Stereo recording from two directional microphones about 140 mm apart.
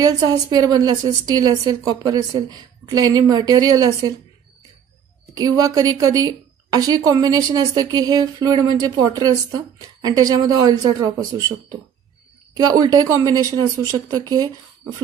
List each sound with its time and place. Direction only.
0.0 s a woman's voice: 25° right (ahead or behind)
5.3 s a woman's voice: 25° right (ahead or behind)